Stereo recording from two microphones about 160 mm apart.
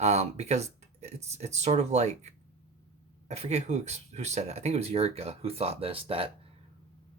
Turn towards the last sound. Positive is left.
turn(degrees=-35)  # may be behind; listen again after turning